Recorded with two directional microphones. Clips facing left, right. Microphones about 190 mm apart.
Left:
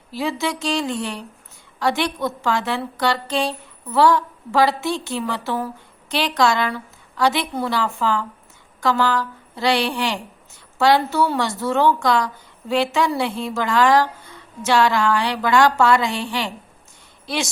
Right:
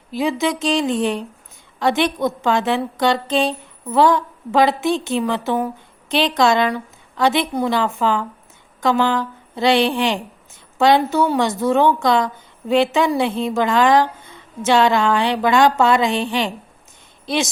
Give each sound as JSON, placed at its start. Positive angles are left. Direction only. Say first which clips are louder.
{"t": 0.1, "sound": "a woman's voice", "louder": "right 4 dB", "side_deg": -15}